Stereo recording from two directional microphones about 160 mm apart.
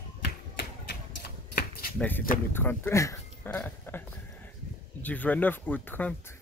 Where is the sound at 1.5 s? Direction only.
70° left (ahead or behind).